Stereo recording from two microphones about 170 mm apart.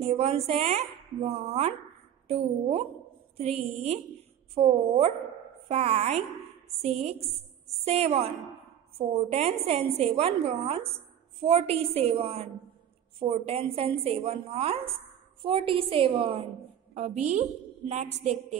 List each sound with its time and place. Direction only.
0.0 s a woman's voice: 40° right (ahead or behind)